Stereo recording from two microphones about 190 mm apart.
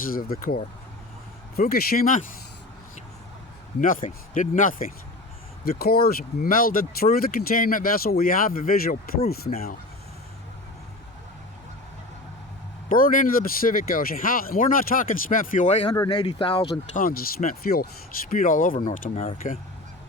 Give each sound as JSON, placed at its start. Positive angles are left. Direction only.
{"t": 0.0, "sound": "speech", "side_deg": 50}
{"t": 3.8, "sound": "speech", "side_deg": 45}
{"t": 12.9, "sound": "speech", "side_deg": 45}
{"t": 15.9, "sound": "speech", "side_deg": 20}
{"t": 16.9, "sound": "speech", "side_deg": 50}